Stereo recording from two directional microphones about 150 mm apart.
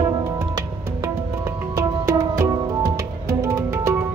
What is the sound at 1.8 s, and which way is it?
Music, 20° right (ahead or behind).